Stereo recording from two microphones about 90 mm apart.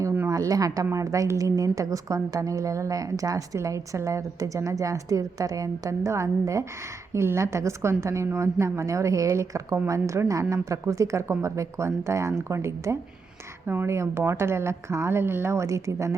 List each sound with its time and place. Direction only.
0.3 s a woman's voice: 40° right (ahead or behind)